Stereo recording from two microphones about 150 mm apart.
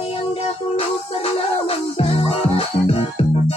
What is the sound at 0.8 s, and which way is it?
Music, 40° left (ahead or behind).